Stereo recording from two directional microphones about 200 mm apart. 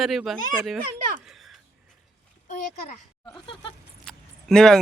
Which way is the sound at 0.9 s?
40° right (ahead or behind).